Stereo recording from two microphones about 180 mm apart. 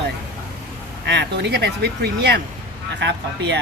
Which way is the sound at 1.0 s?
75° right (ahead or behind).